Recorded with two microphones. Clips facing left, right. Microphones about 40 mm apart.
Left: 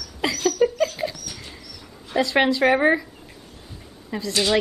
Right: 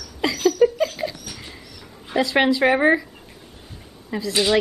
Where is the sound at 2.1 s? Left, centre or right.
Centre.